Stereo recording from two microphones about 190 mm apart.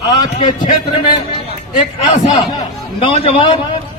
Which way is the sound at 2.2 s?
25° left (ahead or behind).